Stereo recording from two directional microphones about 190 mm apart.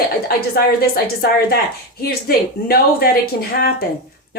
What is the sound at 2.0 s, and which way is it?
A woman's voice, 55° left (ahead or behind).